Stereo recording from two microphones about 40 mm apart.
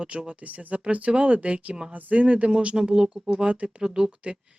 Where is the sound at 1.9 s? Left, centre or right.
Right.